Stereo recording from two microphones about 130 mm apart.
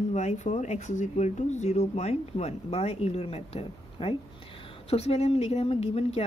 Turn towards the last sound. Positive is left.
turn(degrees=50)  # may be behind; listen again after turning